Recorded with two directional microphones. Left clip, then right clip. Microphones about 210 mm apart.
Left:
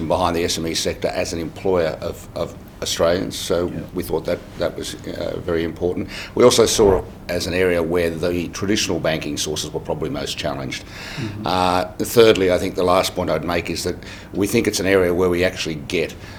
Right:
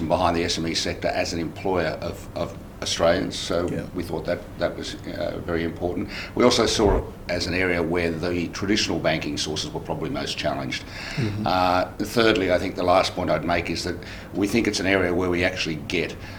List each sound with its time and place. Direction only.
0.1 s speech: 30° left (ahead or behind)